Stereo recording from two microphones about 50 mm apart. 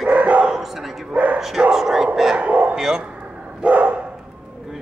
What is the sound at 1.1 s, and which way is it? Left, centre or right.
Bow-wow, right.